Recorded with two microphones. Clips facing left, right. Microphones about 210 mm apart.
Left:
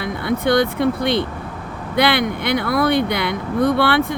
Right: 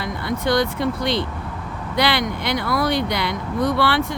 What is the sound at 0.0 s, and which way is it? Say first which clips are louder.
Speech: left 4 dB; 55° left (ahead or behind).